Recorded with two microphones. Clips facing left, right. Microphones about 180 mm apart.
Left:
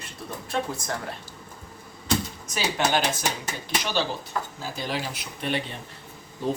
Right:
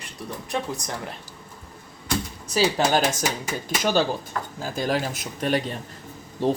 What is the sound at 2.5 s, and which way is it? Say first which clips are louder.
Speech: right 4 dB; 40° right (ahead or behind).